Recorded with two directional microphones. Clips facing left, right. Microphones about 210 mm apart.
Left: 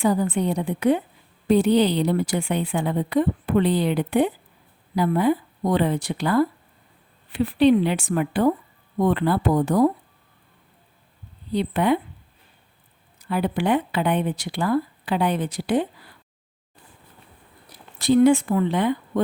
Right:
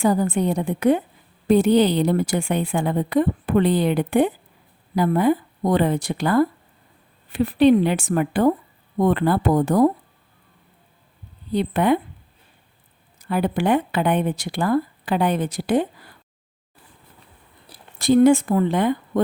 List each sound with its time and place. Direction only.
0.0 s a woman's voice: 45° right (ahead or behind)
11.5 s a woman's voice: 50° right (ahead or behind)
13.1 s speech: 45° right (ahead or behind)
17.7 s a sound: 30° right (ahead or behind)
18.0 s a woman's voice: 45° right (ahead or behind)